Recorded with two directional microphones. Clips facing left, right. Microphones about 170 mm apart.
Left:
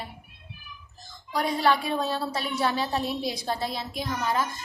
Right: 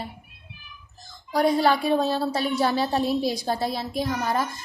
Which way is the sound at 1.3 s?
35° right (ahead or behind).